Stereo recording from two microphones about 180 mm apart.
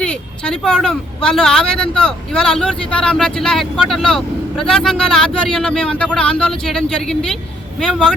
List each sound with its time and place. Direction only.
0.0 s speech: 5° left (ahead or behind)